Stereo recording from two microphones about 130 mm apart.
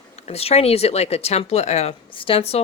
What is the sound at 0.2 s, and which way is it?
Speech, 55° left (ahead or behind).